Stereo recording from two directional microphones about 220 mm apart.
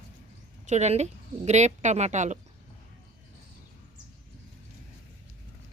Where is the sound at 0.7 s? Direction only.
30° right (ahead or behind).